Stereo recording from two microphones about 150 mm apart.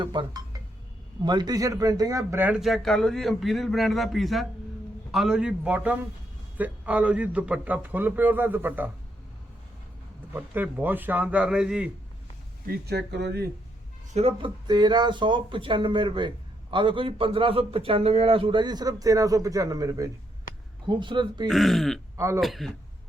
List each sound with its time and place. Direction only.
0.0 s speech: 30° right (ahead or behind); by 2.6 s 15° right (ahead or behind)
2.6 s a man's voice: centre (ahead or behind)
10.3 s a man's voice: 10° right (ahead or behind)
12.6 s speech: 90° right
14.1 s a man's voice: 45° right (ahead or behind)
21.4 s speech: centre (ahead or behind)